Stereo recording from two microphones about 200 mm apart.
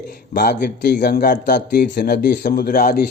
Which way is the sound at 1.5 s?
55° left (ahead or behind).